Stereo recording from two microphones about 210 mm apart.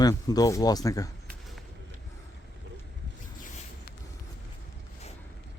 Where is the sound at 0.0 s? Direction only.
20° left (ahead or behind).